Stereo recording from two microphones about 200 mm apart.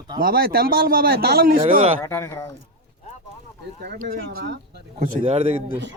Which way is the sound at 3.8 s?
45° right (ahead or behind).